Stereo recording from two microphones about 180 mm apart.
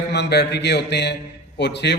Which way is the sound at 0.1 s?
65° left (ahead or behind).